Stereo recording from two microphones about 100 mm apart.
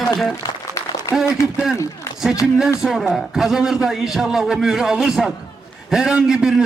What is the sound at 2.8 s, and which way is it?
A man's voice, centre (ahead or behind).